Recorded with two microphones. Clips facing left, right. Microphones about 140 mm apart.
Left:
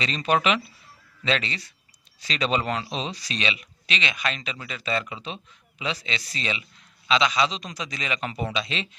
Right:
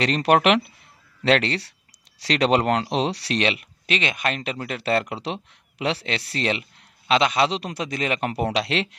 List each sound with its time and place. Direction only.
0.0 s speech: 70° right (ahead or behind)